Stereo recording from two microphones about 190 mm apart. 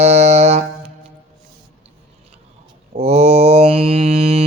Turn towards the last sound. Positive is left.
turn(degrees=-30)  # may be behind; listen again after turning